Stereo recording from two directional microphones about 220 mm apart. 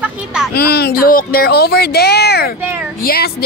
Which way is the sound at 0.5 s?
45° left (ahead or behind).